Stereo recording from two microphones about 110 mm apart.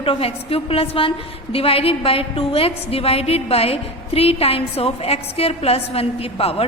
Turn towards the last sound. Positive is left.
turn(degrees=65)  # may be behind; listen again after turning